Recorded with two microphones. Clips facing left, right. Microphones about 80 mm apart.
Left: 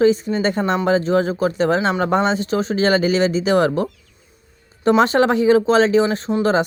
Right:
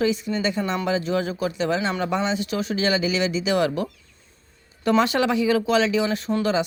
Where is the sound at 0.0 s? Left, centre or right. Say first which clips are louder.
Left 7 dB; left.